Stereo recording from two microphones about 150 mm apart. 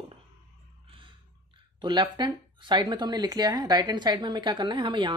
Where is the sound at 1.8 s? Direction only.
30° right (ahead or behind).